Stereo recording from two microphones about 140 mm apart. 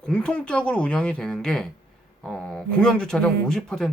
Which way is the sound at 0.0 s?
5° left (ahead or behind).